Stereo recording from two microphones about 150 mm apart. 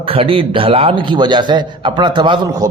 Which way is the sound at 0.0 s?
35° right (ahead or behind).